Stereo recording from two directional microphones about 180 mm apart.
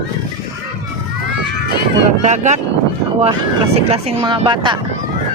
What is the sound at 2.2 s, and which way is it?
Speech, 40° right (ahead or behind).